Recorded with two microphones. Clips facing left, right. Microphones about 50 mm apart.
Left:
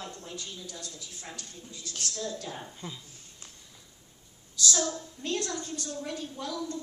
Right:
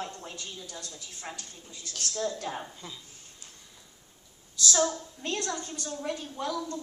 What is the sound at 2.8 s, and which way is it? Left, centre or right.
Speech, left.